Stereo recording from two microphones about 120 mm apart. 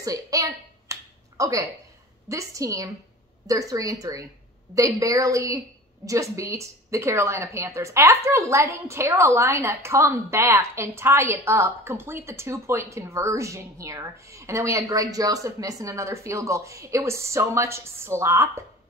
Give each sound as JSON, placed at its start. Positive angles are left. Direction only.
{"t": 0.0, "sound": "finger snapping", "side_deg": -30}
{"t": 2.2, "sound": "a woman's voice", "side_deg": -25}